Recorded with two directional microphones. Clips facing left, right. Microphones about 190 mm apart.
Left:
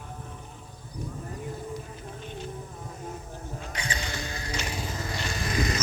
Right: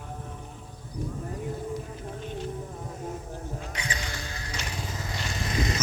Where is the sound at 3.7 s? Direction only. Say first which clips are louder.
Left 1 dB; 30° left (ahead or behind).